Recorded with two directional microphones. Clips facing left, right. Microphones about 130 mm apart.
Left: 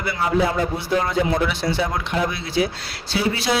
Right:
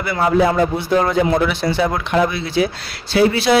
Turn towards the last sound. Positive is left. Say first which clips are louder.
# right 7 dB
turn(degrees=-70)  # may be behind; listen again after turning